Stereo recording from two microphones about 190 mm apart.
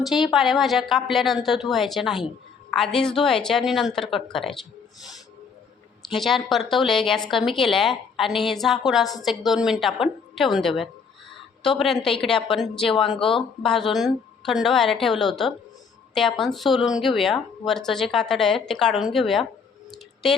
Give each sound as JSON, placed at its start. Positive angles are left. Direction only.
{"t": 0.0, "sound": "speech", "side_deg": 0}
{"t": 6.1, "sound": "speech", "side_deg": 0}
{"t": 13.1, "sound": "speech", "side_deg": 25}
{"t": 13.7, "sound": "speech", "side_deg": 0}